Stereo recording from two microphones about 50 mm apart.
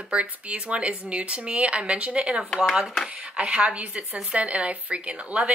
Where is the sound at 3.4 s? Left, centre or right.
Right.